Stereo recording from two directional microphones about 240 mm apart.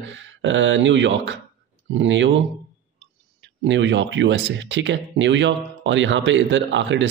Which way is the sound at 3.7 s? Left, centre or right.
Right.